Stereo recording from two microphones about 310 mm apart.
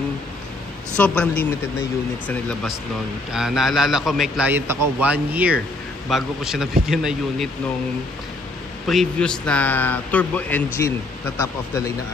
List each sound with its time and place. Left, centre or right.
0.9 s a man's voice: centre
8.8 s a man's voice: centre